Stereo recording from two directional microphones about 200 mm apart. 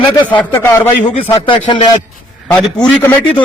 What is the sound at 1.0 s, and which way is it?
Speech, 30° left (ahead or behind).